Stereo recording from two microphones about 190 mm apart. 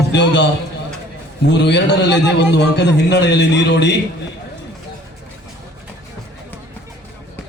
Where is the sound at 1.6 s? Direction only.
65° left (ahead or behind).